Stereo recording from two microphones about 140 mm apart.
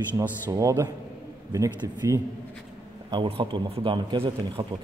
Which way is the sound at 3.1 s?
40° right (ahead or behind).